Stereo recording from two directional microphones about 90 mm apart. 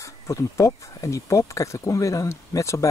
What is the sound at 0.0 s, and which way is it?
Speech, 35° left (ahead or behind).